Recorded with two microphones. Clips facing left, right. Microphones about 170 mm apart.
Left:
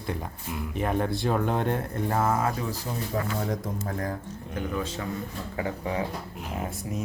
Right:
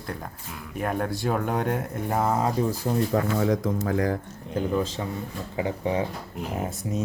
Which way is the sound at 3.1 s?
90° right.